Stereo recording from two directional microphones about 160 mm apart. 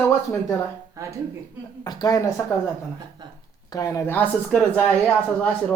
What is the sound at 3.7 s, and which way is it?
Speech, 20° left (ahead or behind).